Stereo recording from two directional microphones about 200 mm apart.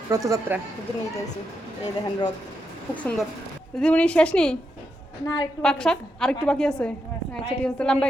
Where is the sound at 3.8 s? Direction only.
5° left (ahead or behind).